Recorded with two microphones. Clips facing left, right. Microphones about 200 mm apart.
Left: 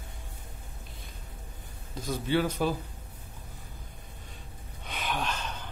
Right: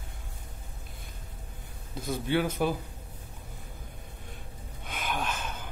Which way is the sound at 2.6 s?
10° right (ahead or behind).